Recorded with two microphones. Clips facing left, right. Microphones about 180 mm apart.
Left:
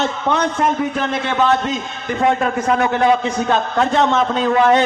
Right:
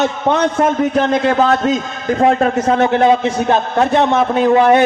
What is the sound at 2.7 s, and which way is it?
A man's voice, 25° right (ahead or behind).